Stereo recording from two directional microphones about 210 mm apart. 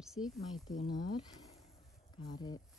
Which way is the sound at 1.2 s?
20° left (ahead or behind).